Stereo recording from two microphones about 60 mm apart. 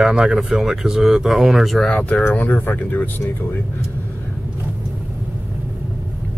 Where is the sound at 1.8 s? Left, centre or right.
Centre.